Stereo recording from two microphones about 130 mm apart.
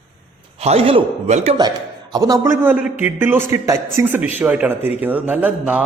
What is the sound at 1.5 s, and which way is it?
A man's voice, 35° right (ahead or behind).